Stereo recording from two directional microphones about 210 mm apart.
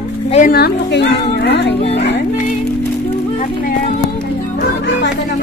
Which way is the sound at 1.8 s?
30° left (ahead or behind).